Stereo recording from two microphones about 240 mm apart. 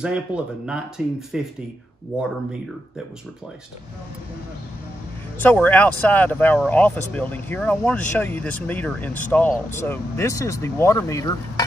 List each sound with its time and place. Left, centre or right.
0.0 s speech: centre
5.4 s speech: centre